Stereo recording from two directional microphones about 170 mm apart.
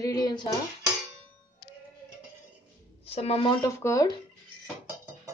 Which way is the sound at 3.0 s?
35° left (ahead or behind).